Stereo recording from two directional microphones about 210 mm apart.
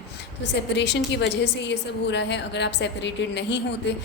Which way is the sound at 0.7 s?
55° left (ahead or behind).